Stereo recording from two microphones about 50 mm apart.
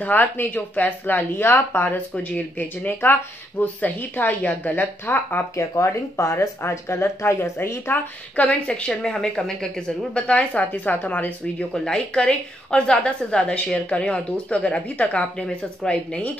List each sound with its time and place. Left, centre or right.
0.0 s speech: left
5.6 s speech: left
6.7 s speech: left
7.5 s speech: left
7.9 s a woman's voice: left
11.7 s a woman's voice: centre